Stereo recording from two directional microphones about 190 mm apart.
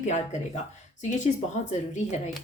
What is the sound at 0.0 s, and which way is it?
Speech, 40° left (ahead or behind).